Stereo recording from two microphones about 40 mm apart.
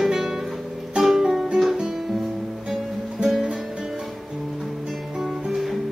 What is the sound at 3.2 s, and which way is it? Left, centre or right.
Music, right.